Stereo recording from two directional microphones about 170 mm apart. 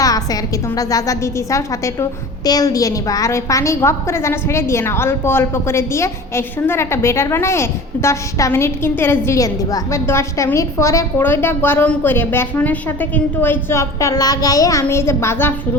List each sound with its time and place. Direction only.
0.0 s music: 20° left (ahead or behind)
0.8 s a woman's voice: 20° left (ahead or behind)